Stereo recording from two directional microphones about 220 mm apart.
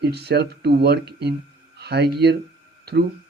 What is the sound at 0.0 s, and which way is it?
Speech, 45° right (ahead or behind).